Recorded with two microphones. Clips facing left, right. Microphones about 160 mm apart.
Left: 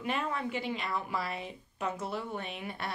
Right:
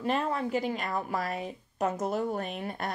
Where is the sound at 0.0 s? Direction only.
35° right (ahead or behind).